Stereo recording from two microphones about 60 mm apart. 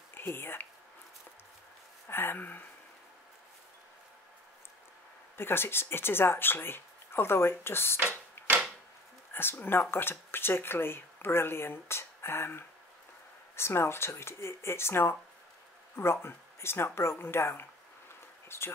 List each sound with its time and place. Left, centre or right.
0.1 s speech: left
2.0 s speech: left
5.4 s speech: left
8.4 s typewriter: left
9.3 s speech: left